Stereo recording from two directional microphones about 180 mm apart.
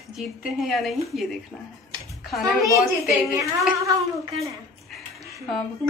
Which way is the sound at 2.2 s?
Centre (ahead or behind).